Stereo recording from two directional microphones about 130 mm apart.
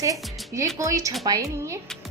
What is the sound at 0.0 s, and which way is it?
A woman's voice, 25° right (ahead or behind).